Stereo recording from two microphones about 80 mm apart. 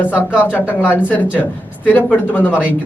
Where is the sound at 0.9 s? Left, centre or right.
Left.